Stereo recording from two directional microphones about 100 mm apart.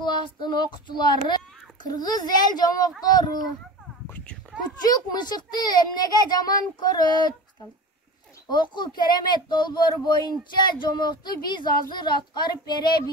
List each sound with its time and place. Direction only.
0.0 s a child's voice: 50° left (ahead or behind)
4.8 s speech: 40° left (ahead or behind)
8.5 s speech: 50° left (ahead or behind)